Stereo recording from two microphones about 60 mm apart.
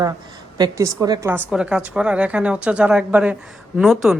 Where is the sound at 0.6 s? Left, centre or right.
Right.